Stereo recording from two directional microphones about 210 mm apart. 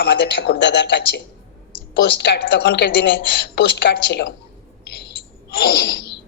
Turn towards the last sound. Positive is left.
turn(degrees=50)  # may be behind; listen again after turning